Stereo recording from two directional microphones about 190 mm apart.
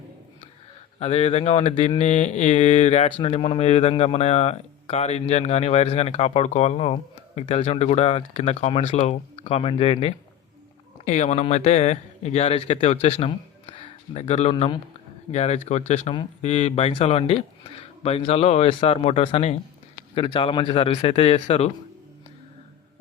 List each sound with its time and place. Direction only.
0.9 s speech: 35° left (ahead or behind)
2.0 s speech: 40° left (ahead or behind)
14.5 s a man's voice: 25° left (ahead or behind)
15.3 s a man's voice: 35° left (ahead or behind)